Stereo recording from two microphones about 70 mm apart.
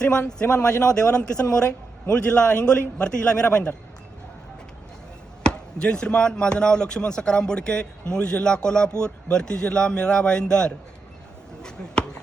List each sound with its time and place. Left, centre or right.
0.0 s speech: centre
5.4 s speech: centre